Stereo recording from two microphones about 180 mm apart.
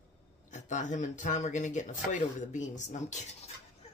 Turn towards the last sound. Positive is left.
turn(degrees=40)  # may be behind; listen again after turning